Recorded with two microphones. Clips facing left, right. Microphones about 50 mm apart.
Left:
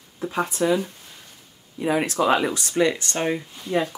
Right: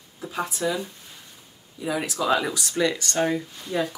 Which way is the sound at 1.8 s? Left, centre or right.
Left.